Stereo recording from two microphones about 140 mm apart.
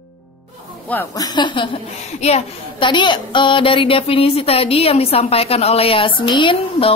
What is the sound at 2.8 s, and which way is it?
A woman's voice, 35° left (ahead or behind).